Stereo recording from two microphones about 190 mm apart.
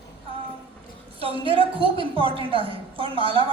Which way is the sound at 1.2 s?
30° right (ahead or behind).